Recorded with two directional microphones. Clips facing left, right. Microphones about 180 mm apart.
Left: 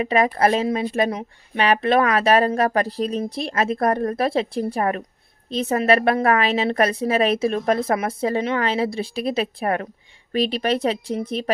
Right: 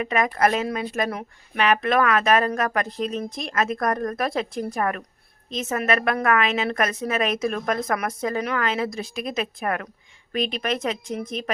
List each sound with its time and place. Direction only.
0.0 s speech: 30° left (ahead or behind)